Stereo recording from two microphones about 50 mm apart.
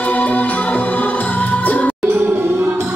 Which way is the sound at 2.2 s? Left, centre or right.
Right.